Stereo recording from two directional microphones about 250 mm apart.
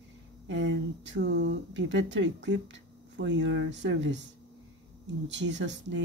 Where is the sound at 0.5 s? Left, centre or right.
Right.